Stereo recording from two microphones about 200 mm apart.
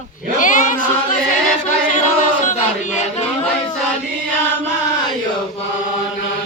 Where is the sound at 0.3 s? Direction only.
40° left (ahead or behind).